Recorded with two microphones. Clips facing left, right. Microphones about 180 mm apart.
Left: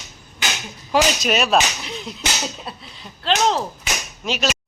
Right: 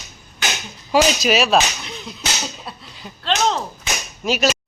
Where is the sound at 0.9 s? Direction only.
5° right (ahead or behind).